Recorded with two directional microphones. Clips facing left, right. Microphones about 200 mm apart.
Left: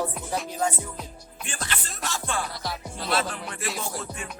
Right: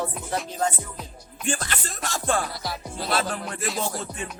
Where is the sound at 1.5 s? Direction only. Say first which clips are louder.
Right 6 dB; 45° right (ahead or behind).